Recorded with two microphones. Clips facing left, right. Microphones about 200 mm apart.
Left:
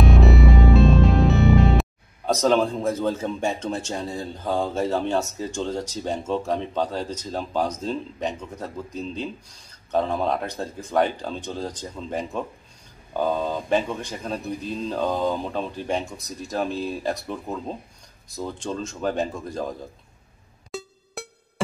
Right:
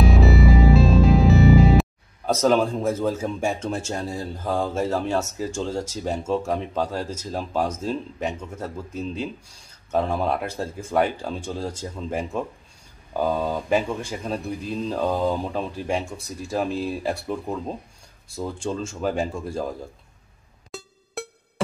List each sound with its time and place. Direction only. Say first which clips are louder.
0.0 s music: even; centre (ahead or behind)
2.4 s speech: right 1 dB; 5° right (ahead or behind)
20.7 s music: even; centre (ahead or behind)